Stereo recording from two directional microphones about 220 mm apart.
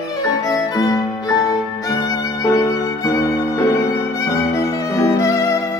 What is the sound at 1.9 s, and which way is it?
Music, 15° left (ahead or behind).